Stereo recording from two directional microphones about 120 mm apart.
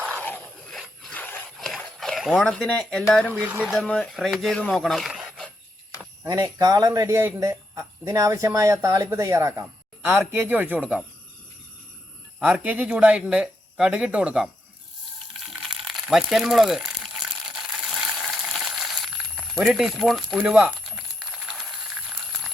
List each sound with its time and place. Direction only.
0.2 s a sound: 10° left (ahead or behind)
0.7 s a sound: centre (ahead or behind)
1.1 s a sound: 15° left (ahead or behind)
1.5 s speech: centre (ahead or behind)
3.3 s speech: 15° right (ahead or behind)
3.8 s speech: 10° left (ahead or behind)
6.2 s a man's voice: 30° right (ahead or behind); by 11.0 s 10° right (ahead or behind)
12.4 s speech: 10° right (ahead or behind)
15.8 s crumpling: centre (ahead or behind)